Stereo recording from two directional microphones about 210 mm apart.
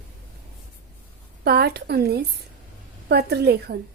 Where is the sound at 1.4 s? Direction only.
50° right (ahead or behind).